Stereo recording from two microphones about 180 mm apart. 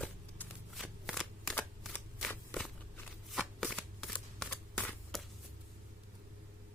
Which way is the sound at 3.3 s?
Centre (ahead or behind).